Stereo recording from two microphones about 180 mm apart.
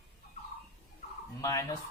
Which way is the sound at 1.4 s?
15° left (ahead or behind).